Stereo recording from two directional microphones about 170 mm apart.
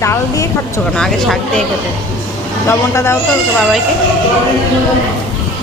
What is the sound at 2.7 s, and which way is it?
Speech, 15° left (ahead or behind).